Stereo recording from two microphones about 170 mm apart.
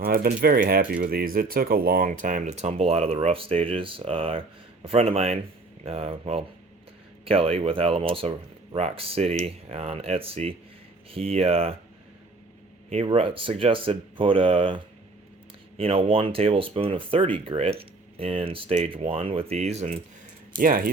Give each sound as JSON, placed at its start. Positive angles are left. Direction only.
{"t": 0.0, "sound": "speech", "side_deg": -60}
{"t": 12.9, "sound": "speech", "side_deg": -35}
{"t": 20.6, "sound": "speech", "side_deg": -55}